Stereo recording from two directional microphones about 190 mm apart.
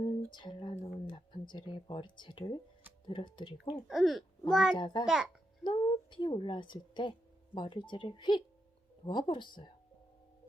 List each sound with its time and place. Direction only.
0.0 s a sound: 25° left (ahead or behind)
0.9 s speech: 25° left (ahead or behind)
3.8 s speech: centre (ahead or behind)
5.6 s a woman's voice: 25° left (ahead or behind)